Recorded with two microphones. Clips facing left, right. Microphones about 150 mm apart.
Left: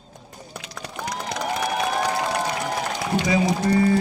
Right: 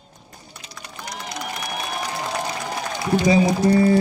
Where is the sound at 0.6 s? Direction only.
90° left.